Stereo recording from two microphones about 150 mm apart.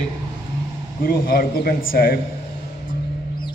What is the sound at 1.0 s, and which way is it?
A man's voice, 80° left.